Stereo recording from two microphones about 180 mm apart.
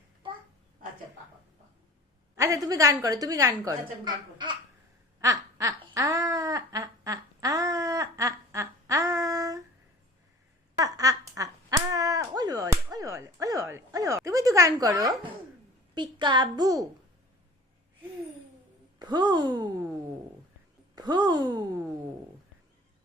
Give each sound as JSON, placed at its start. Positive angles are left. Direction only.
{"t": 2.3, "sound": "a woman's voice", "side_deg": -20}
{"t": 5.2, "sound": "laughter", "side_deg": -20}
{"t": 10.8, "sound": "a sound", "side_deg": -20}
{"t": 16.0, "sound": "a woman's voice", "side_deg": -25}
{"t": 18.9, "sound": "speech", "side_deg": -25}
{"t": 20.9, "sound": "a sound", "side_deg": -25}